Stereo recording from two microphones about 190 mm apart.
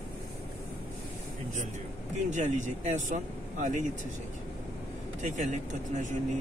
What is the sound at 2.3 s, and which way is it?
Speech, 40° right (ahead or behind).